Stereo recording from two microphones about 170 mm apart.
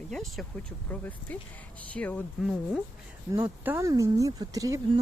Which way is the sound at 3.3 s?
15° right (ahead or behind).